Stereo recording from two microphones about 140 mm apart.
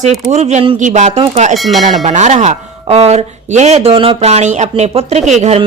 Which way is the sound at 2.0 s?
55° right (ahead or behind).